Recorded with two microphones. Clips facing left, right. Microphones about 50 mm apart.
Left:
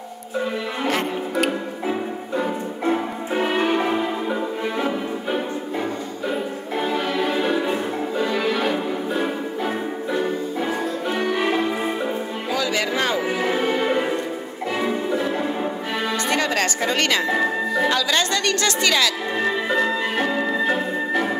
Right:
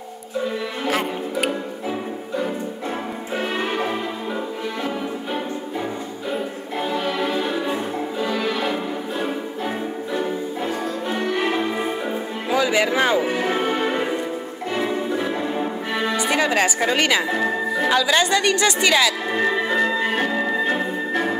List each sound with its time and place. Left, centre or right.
0.8 s music: centre
2.9 s music: centre
6.8 s music: centre
11.1 s music: centre
12.4 s music: centre
15.1 s music: centre
17.3 s music: centre
17.8 s speech: centre
20.2 s organ: centre